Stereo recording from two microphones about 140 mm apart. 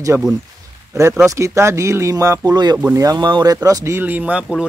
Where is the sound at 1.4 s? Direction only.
20° right (ahead or behind).